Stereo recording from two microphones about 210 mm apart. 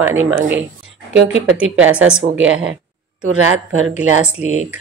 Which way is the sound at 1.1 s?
60° right (ahead or behind).